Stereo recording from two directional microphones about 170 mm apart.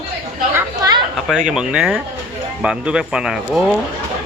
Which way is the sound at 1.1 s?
Centre (ahead or behind).